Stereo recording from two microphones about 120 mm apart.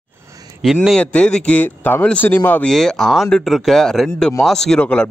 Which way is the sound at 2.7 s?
5° left (ahead or behind).